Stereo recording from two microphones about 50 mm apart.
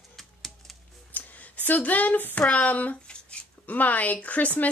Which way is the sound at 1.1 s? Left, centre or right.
Left.